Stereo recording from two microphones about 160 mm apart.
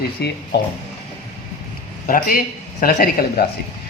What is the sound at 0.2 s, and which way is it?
Speech, 90° left.